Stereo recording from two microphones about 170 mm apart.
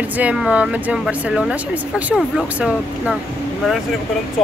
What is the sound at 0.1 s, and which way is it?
Speech, 10° right (ahead or behind).